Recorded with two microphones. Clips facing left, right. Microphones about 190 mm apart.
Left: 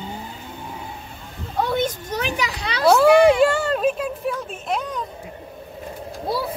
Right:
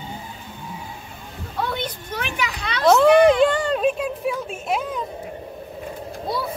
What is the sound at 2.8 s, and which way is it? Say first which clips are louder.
Speech: even; 10° left (ahead or behind).